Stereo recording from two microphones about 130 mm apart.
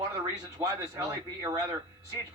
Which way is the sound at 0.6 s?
25° right (ahead or behind).